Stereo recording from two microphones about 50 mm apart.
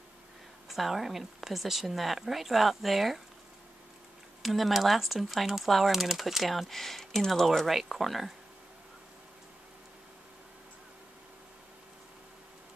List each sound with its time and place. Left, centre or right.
0.7 s speech: centre
4.4 s speech: centre